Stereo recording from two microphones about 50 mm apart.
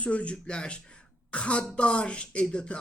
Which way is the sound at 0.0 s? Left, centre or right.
Left.